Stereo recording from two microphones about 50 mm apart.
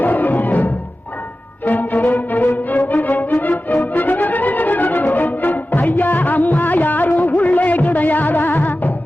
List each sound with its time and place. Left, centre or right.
0.0 s music: left